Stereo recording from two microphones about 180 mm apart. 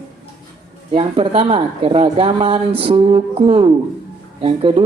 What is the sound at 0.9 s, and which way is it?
Speech, 35° right (ahead or behind).